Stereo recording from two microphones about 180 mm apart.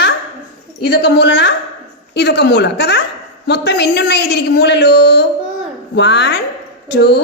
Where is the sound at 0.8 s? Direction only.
65° left (ahead or behind).